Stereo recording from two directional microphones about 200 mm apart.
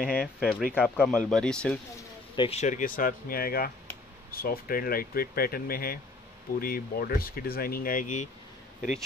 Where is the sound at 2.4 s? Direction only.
30° left (ahead or behind).